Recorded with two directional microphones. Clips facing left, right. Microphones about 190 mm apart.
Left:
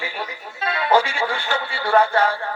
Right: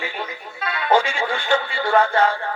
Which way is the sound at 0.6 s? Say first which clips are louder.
Left 3 dB; 30° left (ahead or behind).